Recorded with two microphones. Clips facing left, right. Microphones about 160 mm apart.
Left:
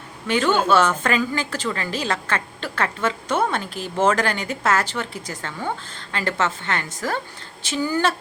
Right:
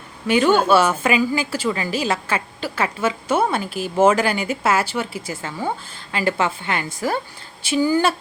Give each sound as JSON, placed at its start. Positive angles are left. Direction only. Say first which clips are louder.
{"t": 0.3, "sound": "a woman's voice", "louder": "right 3 dB", "side_deg": -10}